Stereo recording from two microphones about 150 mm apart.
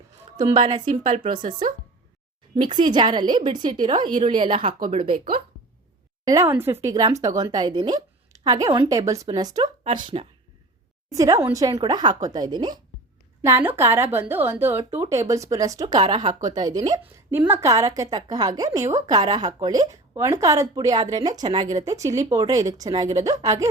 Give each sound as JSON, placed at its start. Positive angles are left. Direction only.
{"t": 0.3, "sound": "a woman's voice", "side_deg": -30}
{"t": 1.0, "sound": "speech", "side_deg": -50}
{"t": 1.3, "sound": "a woman's voice", "side_deg": -30}
{"t": 6.2, "sound": "speech", "side_deg": -20}
{"t": 11.1, "sound": "speech", "side_deg": -20}
{"t": 13.4, "sound": "speech", "side_deg": -15}